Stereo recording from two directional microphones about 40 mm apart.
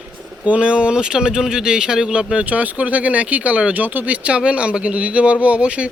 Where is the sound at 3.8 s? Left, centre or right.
Right.